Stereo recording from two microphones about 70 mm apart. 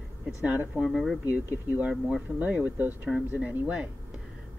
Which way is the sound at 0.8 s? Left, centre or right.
Centre.